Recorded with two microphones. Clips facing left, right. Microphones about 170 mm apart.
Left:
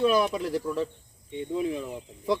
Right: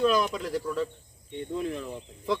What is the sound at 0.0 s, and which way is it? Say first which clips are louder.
Speech: left 2 dB; 10° left (ahead or behind).